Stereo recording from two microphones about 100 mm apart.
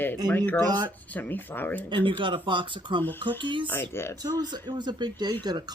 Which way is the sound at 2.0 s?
55° right (ahead or behind).